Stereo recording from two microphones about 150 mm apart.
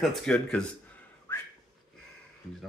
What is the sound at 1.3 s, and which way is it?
Whistling, 15° left (ahead or behind).